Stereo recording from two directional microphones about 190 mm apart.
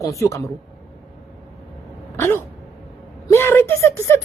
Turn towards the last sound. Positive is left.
turn(degrees=15)  # may be behind; listen again after turning